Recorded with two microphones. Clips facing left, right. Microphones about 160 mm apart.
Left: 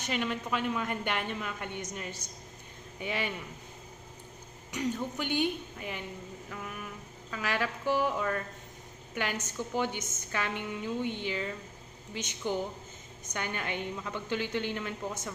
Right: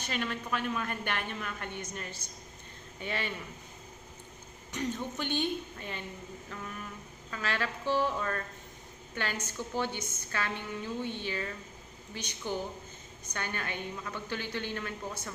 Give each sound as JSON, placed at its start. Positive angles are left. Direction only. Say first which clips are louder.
{"t": 0.0, "sound": "a woman's voice", "louder": "left 2 dB", "side_deg": 15}
{"t": 4.7, "sound": "a woman's voice", "louder": "left 2 dB", "side_deg": 10}